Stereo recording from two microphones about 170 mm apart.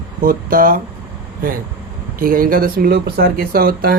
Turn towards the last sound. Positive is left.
turn(degrees=-60)  # may be behind; listen again after turning